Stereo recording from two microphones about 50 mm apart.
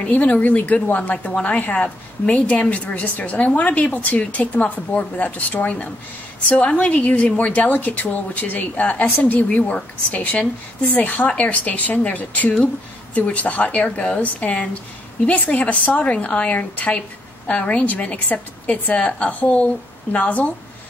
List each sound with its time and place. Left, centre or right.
0.0 s a woman's voice: left